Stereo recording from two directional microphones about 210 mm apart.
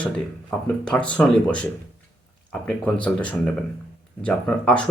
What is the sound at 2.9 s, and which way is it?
Speech, 5° left (ahead or behind).